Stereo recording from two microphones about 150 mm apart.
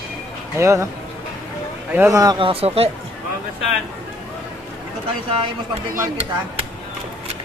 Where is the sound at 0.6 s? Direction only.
20° right (ahead or behind).